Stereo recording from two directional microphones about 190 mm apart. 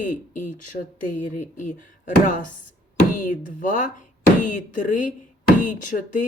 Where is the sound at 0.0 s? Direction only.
40° left (ahead or behind).